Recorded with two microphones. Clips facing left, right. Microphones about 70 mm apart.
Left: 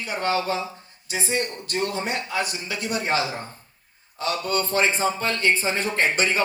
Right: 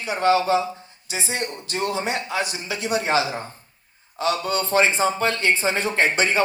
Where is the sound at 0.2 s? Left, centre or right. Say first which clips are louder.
Right 6 dB; left.